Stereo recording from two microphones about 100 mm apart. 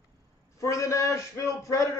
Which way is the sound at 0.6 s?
30° left (ahead or behind).